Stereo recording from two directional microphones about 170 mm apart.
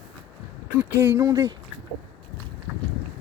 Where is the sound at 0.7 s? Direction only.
10° right (ahead or behind).